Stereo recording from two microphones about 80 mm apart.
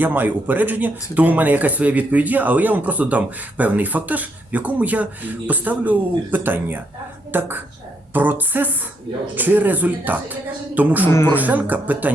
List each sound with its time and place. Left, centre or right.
0.0 s speech: right